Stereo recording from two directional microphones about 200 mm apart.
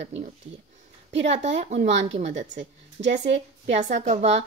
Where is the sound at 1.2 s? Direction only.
35° right (ahead or behind).